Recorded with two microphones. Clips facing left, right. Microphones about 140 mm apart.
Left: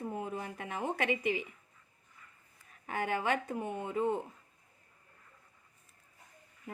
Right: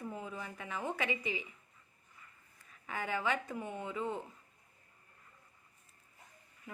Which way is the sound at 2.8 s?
55° left (ahead or behind).